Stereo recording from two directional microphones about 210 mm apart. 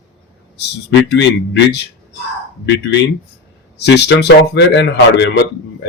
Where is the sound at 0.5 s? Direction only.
55° left (ahead or behind).